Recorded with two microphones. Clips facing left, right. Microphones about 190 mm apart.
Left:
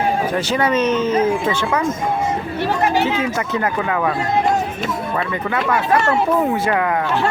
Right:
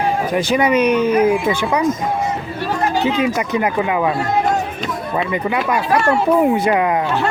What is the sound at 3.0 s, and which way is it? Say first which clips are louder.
Speech: right 2 dB; 15° right (ahead or behind).